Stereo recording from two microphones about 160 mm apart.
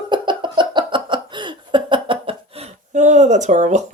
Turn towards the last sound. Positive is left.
turn(degrees=-50)  # may be behind; listen again after turning